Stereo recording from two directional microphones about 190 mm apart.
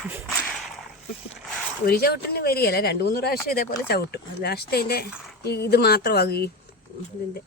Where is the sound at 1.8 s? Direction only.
55° left (ahead or behind).